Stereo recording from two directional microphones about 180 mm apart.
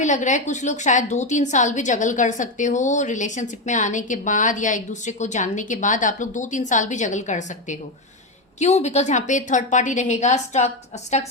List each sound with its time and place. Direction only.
0.0 s a woman's voice: 40° left (ahead or behind)